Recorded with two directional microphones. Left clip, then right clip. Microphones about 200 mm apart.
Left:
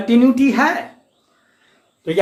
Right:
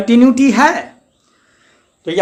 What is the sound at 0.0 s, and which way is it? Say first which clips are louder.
Speech: right 4 dB; 55° right (ahead or behind).